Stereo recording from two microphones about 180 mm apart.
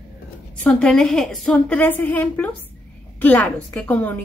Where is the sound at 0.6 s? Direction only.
5° left (ahead or behind).